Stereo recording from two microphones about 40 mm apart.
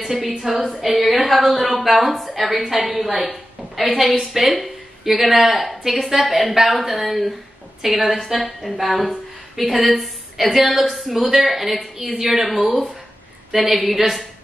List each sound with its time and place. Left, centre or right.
0.0 s speech: centre